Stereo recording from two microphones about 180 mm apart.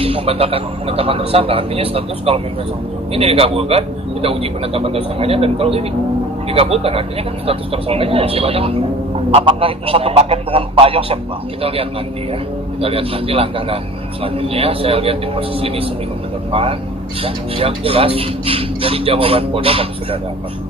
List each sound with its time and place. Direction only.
0.0 s speech: 30° right (ahead or behind)
17.2 s speech: 30° right (ahead or behind)